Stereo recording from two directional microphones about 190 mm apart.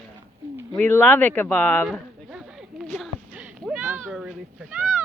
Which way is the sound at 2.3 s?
5° right (ahead or behind).